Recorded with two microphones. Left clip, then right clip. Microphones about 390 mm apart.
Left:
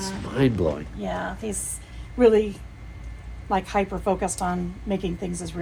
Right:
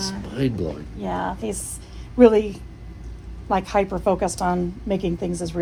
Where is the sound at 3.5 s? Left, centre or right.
Right.